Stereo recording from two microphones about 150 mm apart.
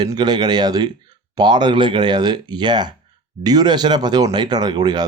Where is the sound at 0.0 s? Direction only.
30° right (ahead or behind).